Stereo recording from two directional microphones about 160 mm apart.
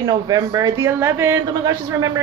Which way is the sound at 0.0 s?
25° right (ahead or behind).